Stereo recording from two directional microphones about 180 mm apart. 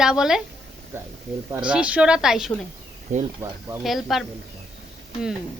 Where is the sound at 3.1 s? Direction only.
45° right (ahead or behind).